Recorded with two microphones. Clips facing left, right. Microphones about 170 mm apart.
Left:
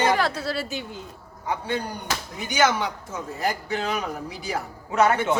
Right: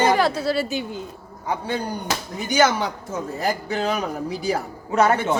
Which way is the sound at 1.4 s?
35° right (ahead or behind).